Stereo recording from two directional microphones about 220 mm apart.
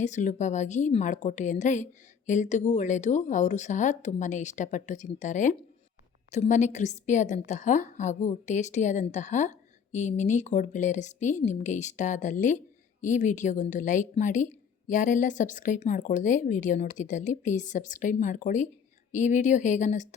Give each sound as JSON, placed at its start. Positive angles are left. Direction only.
{"t": 0.0, "sound": "a woman's voice", "side_deg": 35}